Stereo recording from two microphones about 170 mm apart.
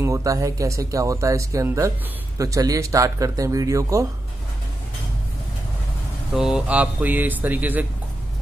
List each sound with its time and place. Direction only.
0.0 s speech: 20° right (ahead or behind)
6.3 s speech: 5° right (ahead or behind)